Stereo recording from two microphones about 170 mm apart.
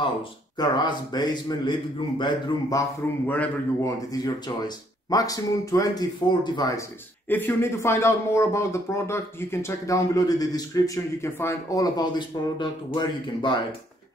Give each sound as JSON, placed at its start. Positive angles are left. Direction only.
{"t": 0.0, "sound": "speech", "side_deg": 25}
{"t": 3.3, "sound": "a man's voice", "side_deg": 10}
{"t": 4.1, "sound": "speech", "side_deg": 20}